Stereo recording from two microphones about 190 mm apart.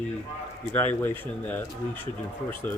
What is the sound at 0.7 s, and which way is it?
Speech, 10° left (ahead or behind).